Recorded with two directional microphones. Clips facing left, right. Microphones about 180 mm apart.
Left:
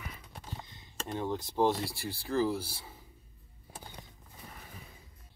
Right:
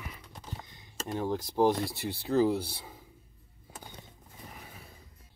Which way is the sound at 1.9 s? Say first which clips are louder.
Right 4 dB; 20° right (ahead or behind).